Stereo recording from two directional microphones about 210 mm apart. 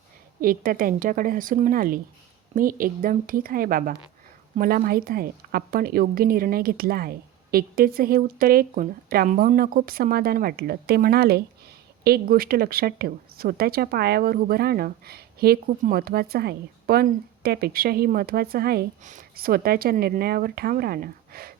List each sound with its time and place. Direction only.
0.4 s a woman's voice: 40° right (ahead or behind)